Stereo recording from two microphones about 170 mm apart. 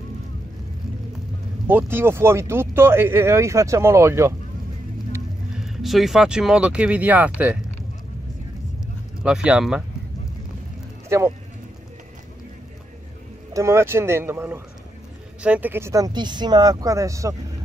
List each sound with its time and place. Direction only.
1.7 s speech: 10° right (ahead or behind)
5.6 s speech: centre (ahead or behind)
9.2 s speech: 5° right (ahead or behind)
11.1 s speech: 15° right (ahead or behind)
13.5 s speech: 20° right (ahead or behind)